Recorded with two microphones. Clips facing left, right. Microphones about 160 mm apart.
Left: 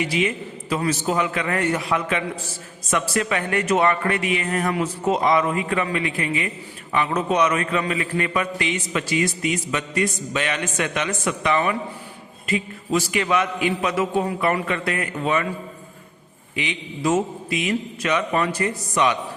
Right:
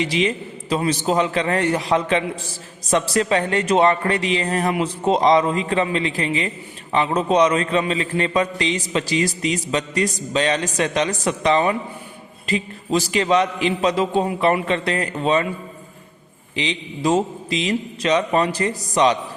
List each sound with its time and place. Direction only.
0.0 s a man's voice: 30° right (ahead or behind)
16.6 s a man's voice: 30° right (ahead or behind)